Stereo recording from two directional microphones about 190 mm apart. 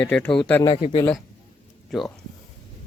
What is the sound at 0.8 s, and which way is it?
Speech, 35° left (ahead or behind).